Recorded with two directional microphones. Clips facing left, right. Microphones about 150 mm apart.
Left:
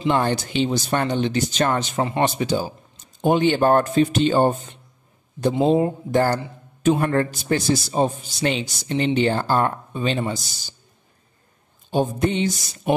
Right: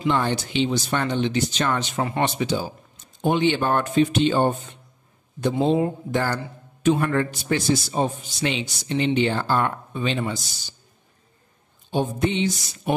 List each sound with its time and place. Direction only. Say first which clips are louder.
0.1 s a man's voice: left 3 dB; 45° left (ahead or behind)
5.6 s a man's voice: left 2 dB; 40° left (ahead or behind)
11.9 s speech: left 2 dB; 45° left (ahead or behind)